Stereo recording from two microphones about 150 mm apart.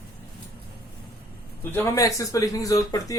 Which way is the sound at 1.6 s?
15° left (ahead or behind).